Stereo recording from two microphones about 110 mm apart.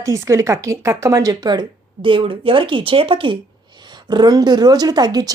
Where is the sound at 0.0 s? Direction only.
30° right (ahead or behind); by 3.3 s 50° right (ahead or behind).